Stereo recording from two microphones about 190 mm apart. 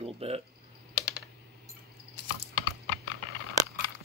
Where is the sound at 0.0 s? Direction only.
30° right (ahead or behind).